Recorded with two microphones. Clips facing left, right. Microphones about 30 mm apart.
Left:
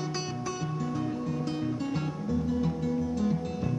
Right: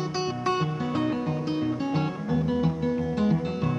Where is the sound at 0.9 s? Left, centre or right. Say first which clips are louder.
Right 9 dB; right.